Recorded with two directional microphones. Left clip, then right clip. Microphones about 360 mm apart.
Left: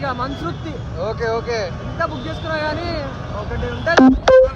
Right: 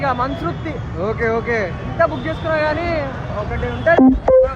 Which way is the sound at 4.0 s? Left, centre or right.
Right.